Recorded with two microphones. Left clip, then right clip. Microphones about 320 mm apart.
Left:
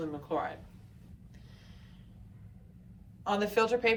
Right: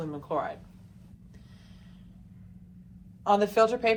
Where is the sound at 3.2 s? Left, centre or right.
Centre.